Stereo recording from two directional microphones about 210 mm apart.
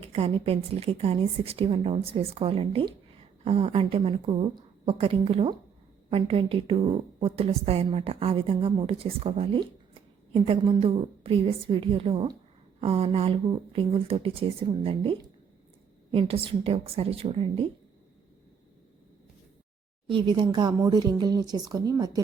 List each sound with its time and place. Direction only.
0.0 s a woman's voice: 30° right (ahead or behind)
20.1 s a woman's voice: 20° right (ahead or behind)